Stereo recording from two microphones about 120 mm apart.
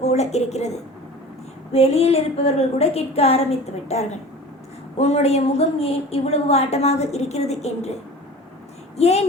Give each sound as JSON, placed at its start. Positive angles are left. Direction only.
{"t": 0.0, "sound": "a woman's voice", "side_deg": 65}
{"t": 1.7, "sound": "a woman's voice", "side_deg": 60}
{"t": 9.0, "sound": "a woman's voice", "side_deg": 60}